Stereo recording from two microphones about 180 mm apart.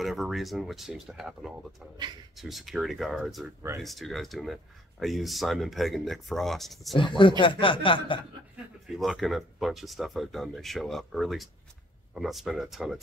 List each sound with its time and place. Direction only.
0.0 s speech: centre (ahead or behind)
7.0 s speech: 25° left (ahead or behind)
8.8 s speech: centre (ahead or behind)